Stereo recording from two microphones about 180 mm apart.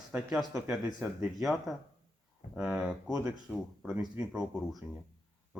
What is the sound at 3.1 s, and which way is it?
Speech, 20° right (ahead or behind).